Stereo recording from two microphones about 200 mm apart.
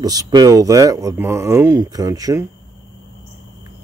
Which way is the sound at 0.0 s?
20° right (ahead or behind).